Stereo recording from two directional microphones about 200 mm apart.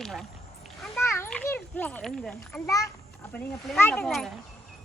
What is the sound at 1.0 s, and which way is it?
A child's voice, 10° left (ahead or behind).